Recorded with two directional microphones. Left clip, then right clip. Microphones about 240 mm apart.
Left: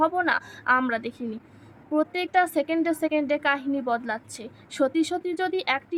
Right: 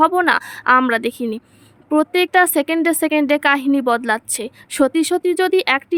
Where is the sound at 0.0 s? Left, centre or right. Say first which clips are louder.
Right 9 dB; right.